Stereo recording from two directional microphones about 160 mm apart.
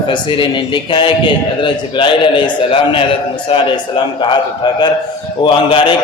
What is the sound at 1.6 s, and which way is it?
A man's voice, 30° left (ahead or behind).